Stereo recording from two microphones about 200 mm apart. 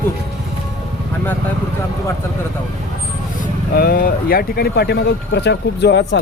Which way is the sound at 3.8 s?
50° left (ahead or behind).